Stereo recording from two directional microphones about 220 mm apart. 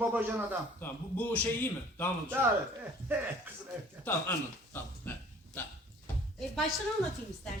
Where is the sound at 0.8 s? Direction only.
5° left (ahead or behind).